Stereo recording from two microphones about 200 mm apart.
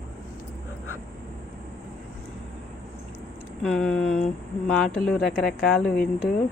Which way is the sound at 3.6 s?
5° left (ahead or behind).